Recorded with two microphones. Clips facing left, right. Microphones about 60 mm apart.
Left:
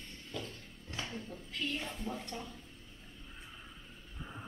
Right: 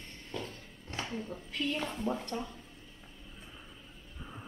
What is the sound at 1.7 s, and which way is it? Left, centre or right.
Speech, right.